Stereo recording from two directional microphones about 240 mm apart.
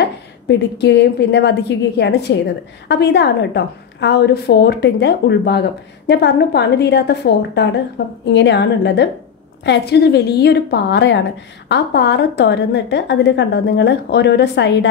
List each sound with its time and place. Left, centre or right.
0.0 s a woman's voice: left